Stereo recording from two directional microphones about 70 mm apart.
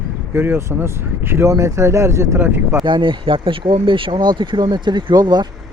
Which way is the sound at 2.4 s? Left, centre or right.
Right.